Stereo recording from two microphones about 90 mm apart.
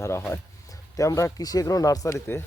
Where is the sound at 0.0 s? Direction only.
30° left (ahead or behind).